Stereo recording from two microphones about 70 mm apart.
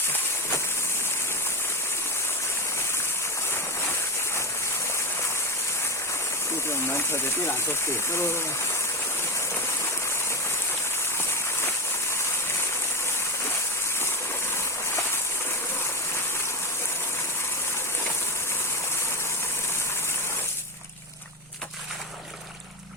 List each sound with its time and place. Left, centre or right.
6.7 s speech: left